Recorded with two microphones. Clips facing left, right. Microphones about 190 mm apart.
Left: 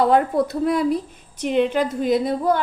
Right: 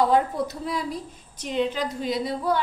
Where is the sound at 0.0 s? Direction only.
65° left (ahead or behind).